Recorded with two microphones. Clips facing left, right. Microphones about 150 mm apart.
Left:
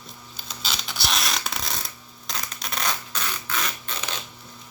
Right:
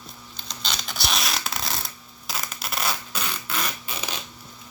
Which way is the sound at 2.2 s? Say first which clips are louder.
Right 1 dB; 5° right (ahead or behind).